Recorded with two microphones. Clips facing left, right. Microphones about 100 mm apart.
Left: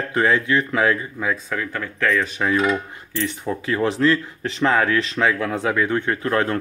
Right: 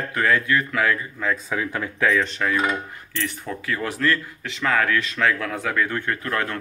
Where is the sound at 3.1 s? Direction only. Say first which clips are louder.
Left 5 dB; 20° left (ahead or behind).